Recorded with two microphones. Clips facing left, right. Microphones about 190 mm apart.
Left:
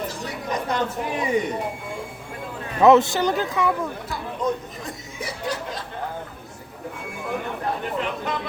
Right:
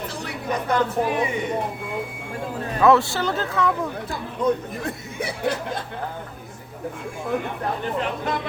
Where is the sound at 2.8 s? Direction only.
20° left (ahead or behind).